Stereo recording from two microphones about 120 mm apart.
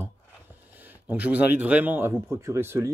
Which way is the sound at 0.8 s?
15° right (ahead or behind).